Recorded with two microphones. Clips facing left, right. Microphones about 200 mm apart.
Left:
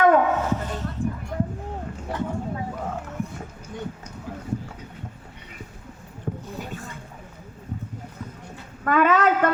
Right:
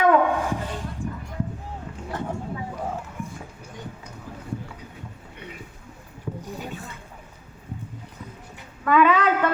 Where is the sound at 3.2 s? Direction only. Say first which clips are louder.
Left 4 dB; 50° right (ahead or behind).